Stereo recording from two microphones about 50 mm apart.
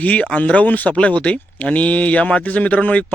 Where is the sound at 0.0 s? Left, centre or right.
Left.